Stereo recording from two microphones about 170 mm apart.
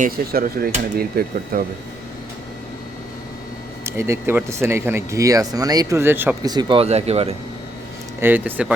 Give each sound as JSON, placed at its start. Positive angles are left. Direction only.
{"t": 0.0, "sound": "speech", "side_deg": -60}
{"t": 3.8, "sound": "speech", "side_deg": -15}
{"t": 6.4, "sound": "speech", "side_deg": -25}
{"t": 8.2, "sound": "speech", "side_deg": -10}